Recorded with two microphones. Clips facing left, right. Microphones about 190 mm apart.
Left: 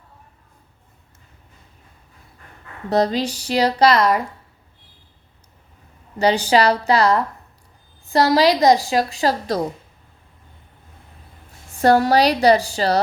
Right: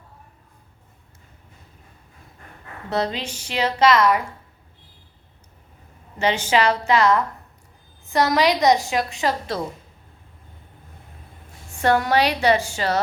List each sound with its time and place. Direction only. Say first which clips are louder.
2.9 s a woman's voice: left 6 dB; 40° left (ahead or behind)
6.1 s a woman's voice: left 4 dB; 35° left (ahead or behind)
11.8 s a woman's voice: left 4 dB; 35° left (ahead or behind)